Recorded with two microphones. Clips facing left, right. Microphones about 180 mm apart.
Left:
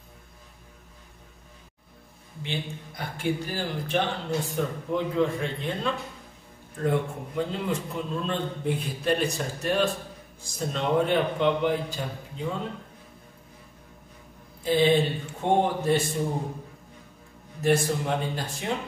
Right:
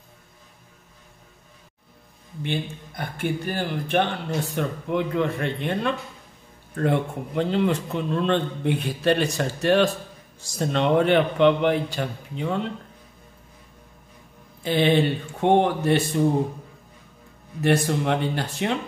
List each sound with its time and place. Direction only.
2.4 s speech: 55° right (ahead or behind)
6.7 s a man's voice: 75° right (ahead or behind)
14.6 s a man's voice: 65° right (ahead or behind)
17.6 s a man's voice: 65° right (ahead or behind)